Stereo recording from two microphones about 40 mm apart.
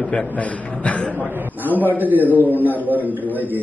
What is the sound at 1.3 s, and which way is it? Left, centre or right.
A man's voice, right.